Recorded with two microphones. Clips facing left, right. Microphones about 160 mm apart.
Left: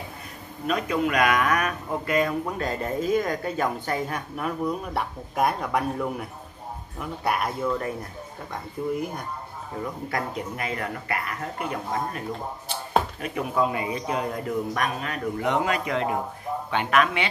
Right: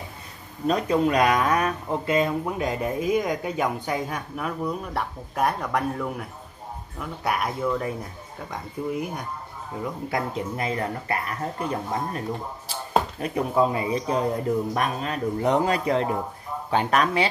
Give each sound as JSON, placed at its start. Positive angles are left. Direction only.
{"t": 0.7, "sound": "speech", "side_deg": -35}
{"t": 4.4, "sound": "speech", "side_deg": 0}
{"t": 10.1, "sound": "a man's voice", "side_deg": -30}
{"t": 13.2, "sound": "a man's voice", "side_deg": -35}